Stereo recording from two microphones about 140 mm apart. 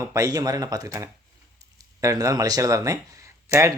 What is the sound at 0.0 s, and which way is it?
Speech, 20° right (ahead or behind).